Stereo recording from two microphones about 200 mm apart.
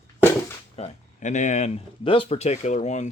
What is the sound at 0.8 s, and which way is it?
Speech, 35° left (ahead or behind).